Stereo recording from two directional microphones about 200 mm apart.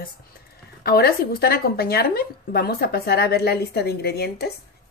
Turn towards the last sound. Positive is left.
turn(degrees=55)  # may be behind; listen again after turning